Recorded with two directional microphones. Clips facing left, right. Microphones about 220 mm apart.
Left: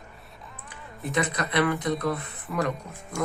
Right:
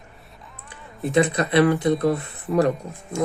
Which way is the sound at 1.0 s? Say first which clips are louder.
Right 8 dB; 30° right (ahead or behind).